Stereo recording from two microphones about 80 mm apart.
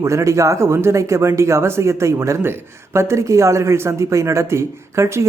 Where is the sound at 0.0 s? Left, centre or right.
Right.